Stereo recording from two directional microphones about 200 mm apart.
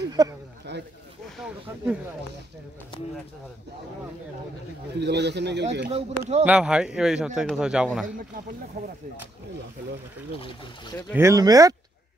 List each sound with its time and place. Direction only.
0.2 s speech: 20° right (ahead or behind)
0.7 s a sound: 60° right (ahead or behind)
5.0 s speech: 60° right (ahead or behind)
5.9 s speech: 30° right (ahead or behind)
6.4 s a man's voice: 5° right (ahead or behind)
10.4 s speech: 20° left (ahead or behind)
11.1 s speech: 15° right (ahead or behind)